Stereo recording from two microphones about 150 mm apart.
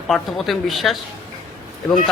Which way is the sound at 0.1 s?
Centre (ahead or behind).